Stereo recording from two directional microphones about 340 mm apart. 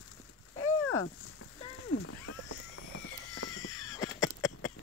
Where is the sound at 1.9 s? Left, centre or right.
Left.